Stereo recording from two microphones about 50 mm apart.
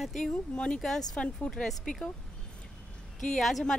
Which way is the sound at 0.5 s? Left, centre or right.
Centre.